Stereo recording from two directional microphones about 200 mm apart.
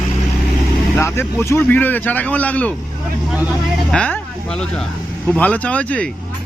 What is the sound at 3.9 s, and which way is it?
Speech, 5° left (ahead or behind).